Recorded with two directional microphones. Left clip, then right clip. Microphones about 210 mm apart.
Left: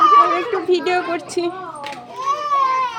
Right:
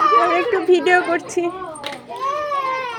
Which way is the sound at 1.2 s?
20° left (ahead or behind).